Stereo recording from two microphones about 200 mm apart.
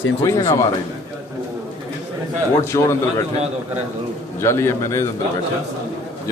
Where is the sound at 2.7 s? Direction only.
15° left (ahead or behind).